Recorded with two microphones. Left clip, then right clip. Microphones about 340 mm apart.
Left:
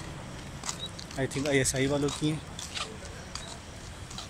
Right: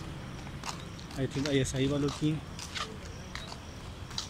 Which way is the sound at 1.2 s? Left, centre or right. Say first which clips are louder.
Left 3 dB; left.